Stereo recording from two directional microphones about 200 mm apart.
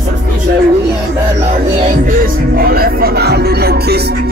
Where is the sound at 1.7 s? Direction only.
35° right (ahead or behind).